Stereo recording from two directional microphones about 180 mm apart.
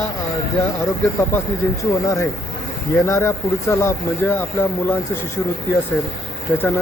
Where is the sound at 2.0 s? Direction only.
15° left (ahead or behind).